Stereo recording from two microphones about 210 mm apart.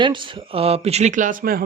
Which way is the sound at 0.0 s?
25° right (ahead or behind).